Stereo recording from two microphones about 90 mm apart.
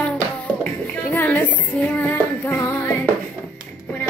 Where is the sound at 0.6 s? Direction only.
20° left (ahead or behind).